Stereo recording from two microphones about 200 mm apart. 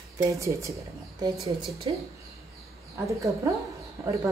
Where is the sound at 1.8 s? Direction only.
25° right (ahead or behind).